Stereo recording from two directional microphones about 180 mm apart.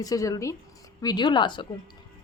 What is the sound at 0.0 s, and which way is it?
A woman's voice, 20° left (ahead or behind).